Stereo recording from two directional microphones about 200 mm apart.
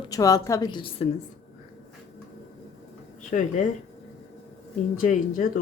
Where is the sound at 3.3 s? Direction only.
40° left (ahead or behind).